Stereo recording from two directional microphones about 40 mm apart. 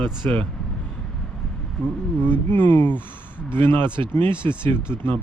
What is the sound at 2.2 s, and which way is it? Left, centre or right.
Speech, left.